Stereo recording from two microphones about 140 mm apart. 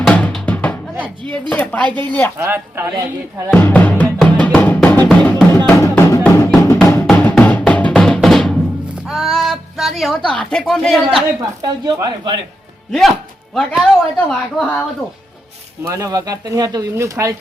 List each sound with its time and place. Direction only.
0.0 s music: 10° left (ahead or behind)
1.2 s speech: 10° left (ahead or behind)
2.4 s speech: 15° right (ahead or behind)
3.5 s music: 10° left (ahead or behind)
7.6 s drum: 10° left (ahead or behind)
9.0 s a sound: centre (ahead or behind)
10.2 s speech: 5° left (ahead or behind)
11.3 s speech: 25° right (ahead or behind)
12.9 s speech: centre (ahead or behind)
15.9 s speech: 25° right (ahead or behind)